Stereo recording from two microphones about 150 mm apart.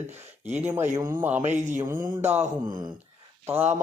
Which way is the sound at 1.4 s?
50° right (ahead or behind).